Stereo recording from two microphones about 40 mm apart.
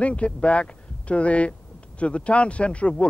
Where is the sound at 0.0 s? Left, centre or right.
Left.